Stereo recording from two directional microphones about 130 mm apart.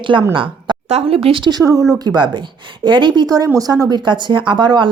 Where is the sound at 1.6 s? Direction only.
25° right (ahead or behind).